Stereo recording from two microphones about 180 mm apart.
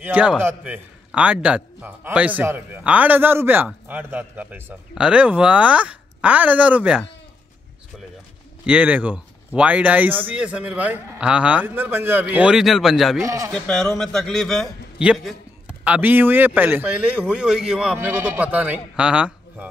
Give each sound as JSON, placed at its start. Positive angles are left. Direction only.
{"t": 0.0, "sound": "a man's voice", "side_deg": -5}
{"t": 8.6, "sound": "a man's voice", "side_deg": -5}
{"t": 13.2, "sound": "a man's voice", "side_deg": -15}
{"t": 13.5, "sound": "a man's voice", "side_deg": 5}